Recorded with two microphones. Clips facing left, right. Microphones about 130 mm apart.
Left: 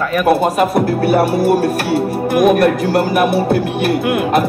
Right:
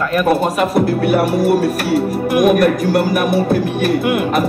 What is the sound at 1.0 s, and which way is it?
Speech, 30° left (ahead or behind).